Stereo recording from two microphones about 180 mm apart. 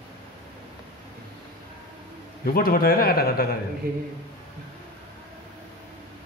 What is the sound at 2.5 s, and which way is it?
A man's voice, 55° left (ahead or behind).